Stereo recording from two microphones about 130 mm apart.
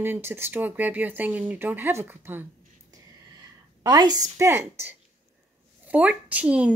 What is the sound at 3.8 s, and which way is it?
Speech, 30° right (ahead or behind).